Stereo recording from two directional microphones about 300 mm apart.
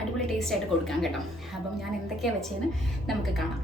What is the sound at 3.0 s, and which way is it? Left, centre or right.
Speech, centre.